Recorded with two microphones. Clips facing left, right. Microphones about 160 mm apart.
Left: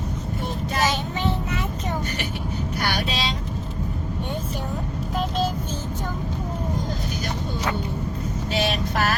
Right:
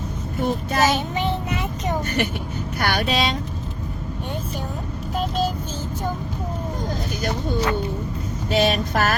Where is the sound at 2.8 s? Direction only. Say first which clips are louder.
Right 6 dB; 55° right (ahead or behind).